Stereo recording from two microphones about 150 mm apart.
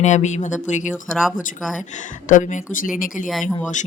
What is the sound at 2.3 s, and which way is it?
Speech, 60° left (ahead or behind).